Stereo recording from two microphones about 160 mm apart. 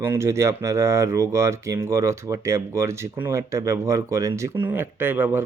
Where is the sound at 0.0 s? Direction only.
15° right (ahead or behind).